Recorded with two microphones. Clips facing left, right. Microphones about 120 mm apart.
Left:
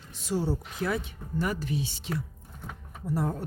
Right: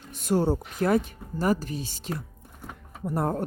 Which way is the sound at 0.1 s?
55° right (ahead or behind).